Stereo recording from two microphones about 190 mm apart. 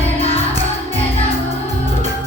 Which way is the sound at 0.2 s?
30° left (ahead or behind).